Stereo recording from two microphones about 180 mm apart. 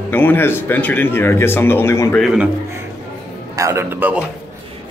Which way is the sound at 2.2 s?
Centre (ahead or behind).